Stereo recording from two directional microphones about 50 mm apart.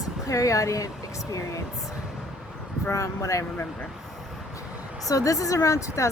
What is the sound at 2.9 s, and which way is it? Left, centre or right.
Speech, left.